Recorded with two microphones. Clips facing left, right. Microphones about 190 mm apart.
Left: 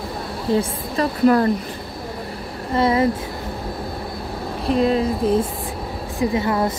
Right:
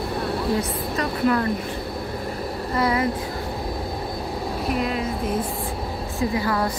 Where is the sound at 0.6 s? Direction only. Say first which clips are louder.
Left 3 dB; 35° left (ahead or behind).